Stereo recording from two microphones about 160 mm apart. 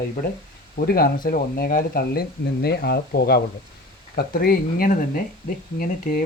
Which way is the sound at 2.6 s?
85° left.